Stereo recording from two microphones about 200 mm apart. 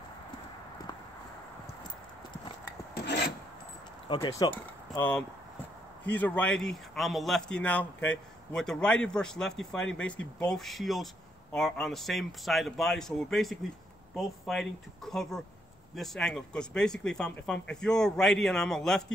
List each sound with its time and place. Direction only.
4.1 s speech: 25° left (ahead or behind)
6.0 s a man's voice: 10° left (ahead or behind)